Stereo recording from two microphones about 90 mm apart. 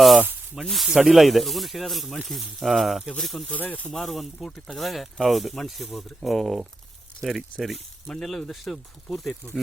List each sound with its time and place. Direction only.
0.5 s speech: centre (ahead or behind)
3.5 s speech: 15° left (ahead or behind)
3.9 s speech: centre (ahead or behind)